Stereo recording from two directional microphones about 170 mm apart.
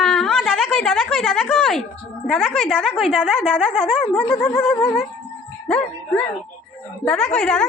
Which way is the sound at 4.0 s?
10° left (ahead or behind).